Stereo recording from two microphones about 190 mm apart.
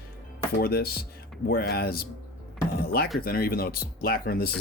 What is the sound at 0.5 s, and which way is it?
Speech, 55° left (ahead or behind).